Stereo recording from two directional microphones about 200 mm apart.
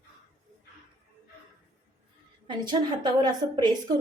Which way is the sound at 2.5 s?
20° right (ahead or behind).